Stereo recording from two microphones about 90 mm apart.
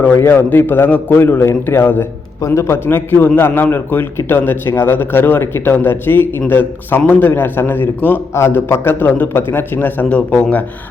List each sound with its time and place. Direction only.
0.2 s a man's voice: 25° left (ahead or behind)